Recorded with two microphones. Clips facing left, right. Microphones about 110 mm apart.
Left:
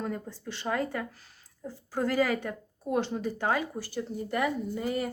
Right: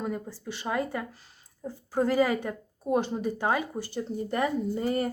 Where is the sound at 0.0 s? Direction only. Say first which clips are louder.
Right 2 dB; 15° right (ahead or behind).